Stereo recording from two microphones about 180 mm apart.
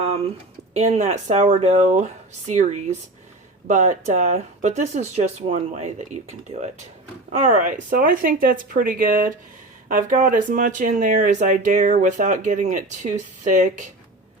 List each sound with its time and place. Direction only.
0.7 s speech: 35° right (ahead or behind)